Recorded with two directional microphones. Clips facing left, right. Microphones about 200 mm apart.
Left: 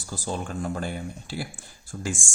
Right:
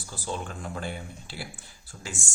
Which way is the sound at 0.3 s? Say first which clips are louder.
Left 4 dB; 45° left (ahead or behind).